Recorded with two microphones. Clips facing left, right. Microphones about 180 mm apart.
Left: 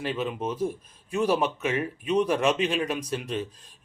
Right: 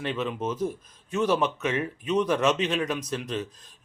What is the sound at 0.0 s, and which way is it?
Speech, 5° left (ahead or behind).